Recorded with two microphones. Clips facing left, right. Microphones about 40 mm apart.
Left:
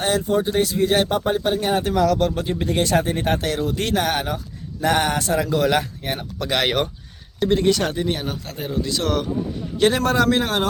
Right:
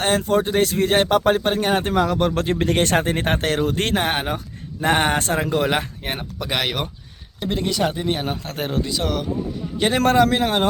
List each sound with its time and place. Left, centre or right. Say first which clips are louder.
0.2 s speech: right 1 dB; right
2.3 s speech: right 3 dB; right
3.9 s speech: even; right
6.1 s speech: left 2 dB; centre
8.0 s speech: right 1 dB; right
8.5 s speech: right 2 dB; right
8.9 s speech: left 2 dB; centre
9.8 s speech: right 1 dB; centre